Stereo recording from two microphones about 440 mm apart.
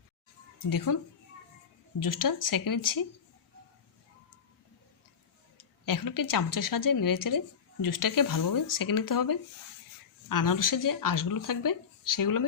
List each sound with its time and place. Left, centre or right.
0.9 s a woman's voice: left
5.8 s a woman's voice: left